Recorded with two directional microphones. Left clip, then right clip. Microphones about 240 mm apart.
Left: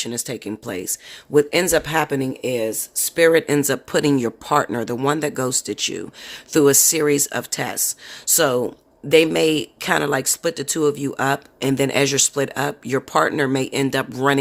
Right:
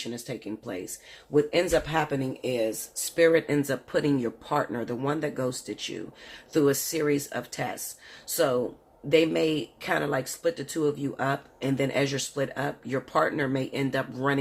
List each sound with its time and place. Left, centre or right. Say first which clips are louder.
0.0 s speech: left 8 dB; left